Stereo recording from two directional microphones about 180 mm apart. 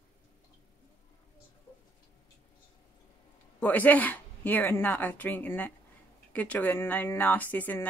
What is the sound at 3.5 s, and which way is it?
Speech, 10° left (ahead or behind).